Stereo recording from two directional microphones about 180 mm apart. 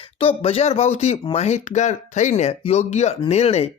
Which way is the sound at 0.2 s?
30° left (ahead or behind).